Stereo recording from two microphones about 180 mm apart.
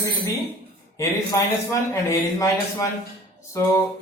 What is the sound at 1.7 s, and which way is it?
Speech, 15° left (ahead or behind).